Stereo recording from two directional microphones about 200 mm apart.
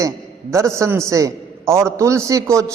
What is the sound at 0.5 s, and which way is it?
A man's voice, 15° right (ahead or behind).